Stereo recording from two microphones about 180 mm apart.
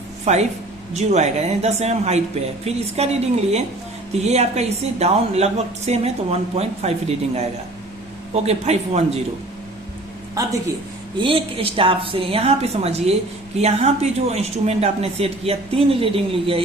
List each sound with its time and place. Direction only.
0.3 s speech: 40° right (ahead or behind)
8.3 s speech: 35° right (ahead or behind)
10.4 s speech: 20° right (ahead or behind)
11.2 s speech: 30° right (ahead or behind)